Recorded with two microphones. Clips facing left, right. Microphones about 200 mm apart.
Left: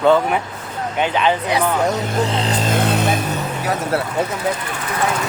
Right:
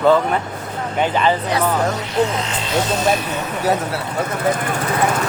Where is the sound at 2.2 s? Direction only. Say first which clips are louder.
Right 3 dB; 35° left (ahead or behind); by 3.1 s 60° left (ahead or behind).